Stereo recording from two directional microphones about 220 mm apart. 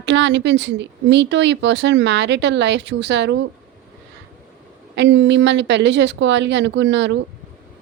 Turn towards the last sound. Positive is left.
turn(degrees=-55)  # may be behind; listen again after turning